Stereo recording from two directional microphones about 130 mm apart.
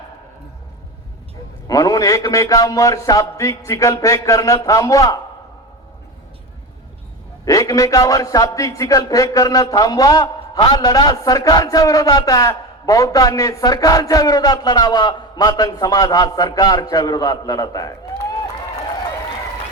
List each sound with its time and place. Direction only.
1.6 s a man's voice: 25° left (ahead or behind)
7.4 s a man's voice: 25° left (ahead or behind)